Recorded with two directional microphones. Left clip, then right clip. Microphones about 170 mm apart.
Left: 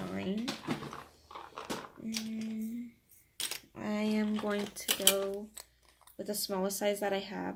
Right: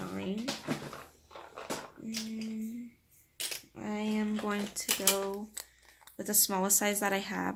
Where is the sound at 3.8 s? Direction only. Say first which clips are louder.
Left 2 dB; 15° left (ahead or behind).